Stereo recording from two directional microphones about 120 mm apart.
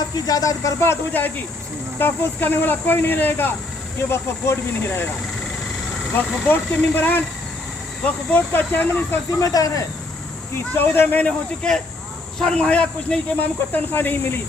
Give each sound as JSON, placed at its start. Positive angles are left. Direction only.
{"t": 0.3, "sound": "speech", "side_deg": 30}
{"t": 6.1, "sound": "speech", "side_deg": 15}
{"t": 9.4, "sound": "speech", "side_deg": 30}
{"t": 10.8, "sound": "speech", "side_deg": 15}